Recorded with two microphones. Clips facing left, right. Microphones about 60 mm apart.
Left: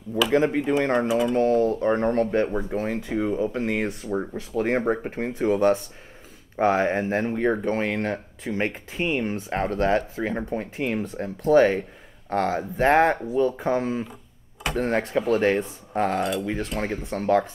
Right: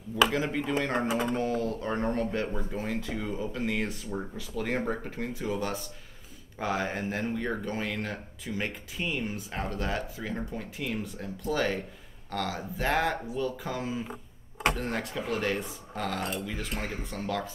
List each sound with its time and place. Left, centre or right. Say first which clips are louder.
0.3 s speech: left 9 dB; left
1.0 s speech: left 6 dB; right
1.3 s speech: left 9 dB; left
1.7 s speech: left 8 dB; left